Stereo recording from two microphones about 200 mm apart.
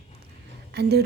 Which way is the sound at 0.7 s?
55° right (ahead or behind).